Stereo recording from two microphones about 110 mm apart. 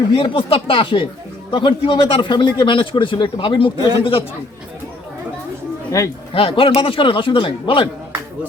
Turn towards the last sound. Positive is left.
turn(degrees=50)  # may be behind; listen again after turning